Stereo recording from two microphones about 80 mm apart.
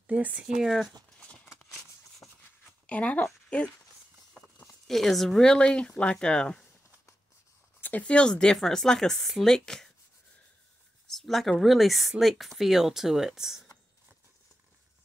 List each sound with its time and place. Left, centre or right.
0.0 s speech: centre
0.6 s speech: centre
1.2 s a sound: centre
2.2 s shuffle: left
2.9 s speech: centre
4.8 s speech: centre
7.8 s speech: centre
11.1 s a sound: centre
11.6 s speech: centre